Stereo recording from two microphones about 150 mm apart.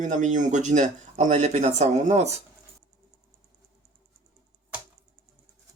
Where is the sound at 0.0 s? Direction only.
55° right (ahead or behind).